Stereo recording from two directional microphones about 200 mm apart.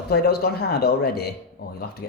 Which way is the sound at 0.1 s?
55° left (ahead or behind).